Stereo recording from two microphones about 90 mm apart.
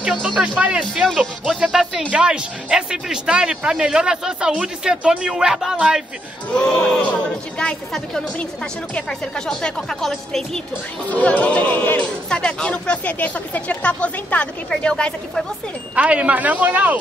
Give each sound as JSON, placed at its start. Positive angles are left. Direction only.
{"t": 0.2, "sound": "speech", "side_deg": -15}
{"t": 1.0, "sound": "speech", "side_deg": 0}
{"t": 6.5, "sound": "speech", "side_deg": 10}
{"t": 11.1, "sound": "speech", "side_deg": 15}
{"t": 15.9, "sound": "speech", "side_deg": -15}